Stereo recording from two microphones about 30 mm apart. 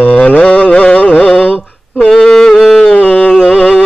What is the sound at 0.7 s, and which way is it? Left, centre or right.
Carnatic music, left.